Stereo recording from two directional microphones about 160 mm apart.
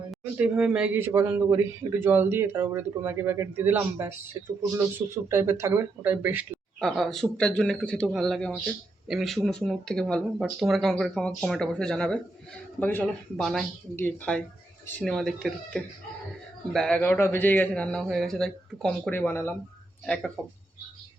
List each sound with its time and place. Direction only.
0.3 s a man's voice: 5° right (ahead or behind)
6.7 s a man's voice: centre (ahead or behind)